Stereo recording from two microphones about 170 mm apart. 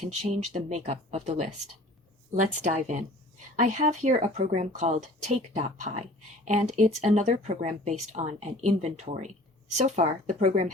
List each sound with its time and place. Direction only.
0.1 s speech: 45° right (ahead or behind)